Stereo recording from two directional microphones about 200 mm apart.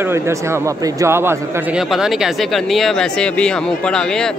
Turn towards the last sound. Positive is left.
turn(degrees=5)  # may be behind; listen again after turning